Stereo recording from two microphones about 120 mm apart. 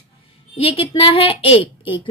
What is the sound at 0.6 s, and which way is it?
A woman's voice, 55° left (ahead or behind).